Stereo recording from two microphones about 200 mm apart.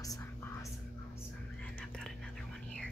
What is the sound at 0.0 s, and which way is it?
Whispering, 15° left (ahead or behind).